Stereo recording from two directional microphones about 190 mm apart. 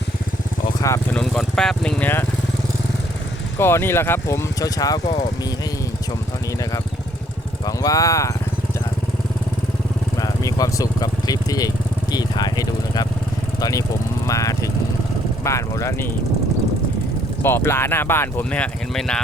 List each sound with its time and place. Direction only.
0.8 s speech: 15° left (ahead or behind)
1.2 s speech: 5° left (ahead or behind)
3.6 s speech: 10° left (ahead or behind)
7.6 s speech: 20° left (ahead or behind)
10.2 s speech: 20° left (ahead or behind)
14.3 s vehicle: 15° left (ahead or behind)
15.4 s speech: 15° left (ahead or behind)
17.4 s speech: 10° left (ahead or behind)